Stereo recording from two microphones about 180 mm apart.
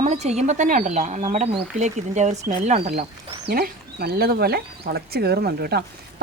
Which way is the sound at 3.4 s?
60° right (ahead or behind).